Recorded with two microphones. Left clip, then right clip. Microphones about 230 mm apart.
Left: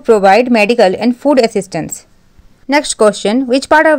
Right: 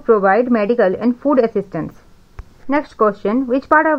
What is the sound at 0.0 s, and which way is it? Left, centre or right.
Speech, left.